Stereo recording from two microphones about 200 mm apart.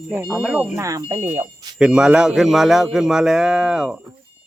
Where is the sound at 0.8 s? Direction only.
15° right (ahead or behind).